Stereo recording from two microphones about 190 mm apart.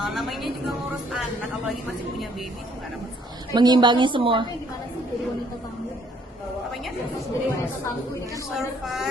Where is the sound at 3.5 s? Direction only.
25° right (ahead or behind).